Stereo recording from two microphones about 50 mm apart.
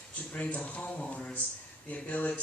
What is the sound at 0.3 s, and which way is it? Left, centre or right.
Speech, left.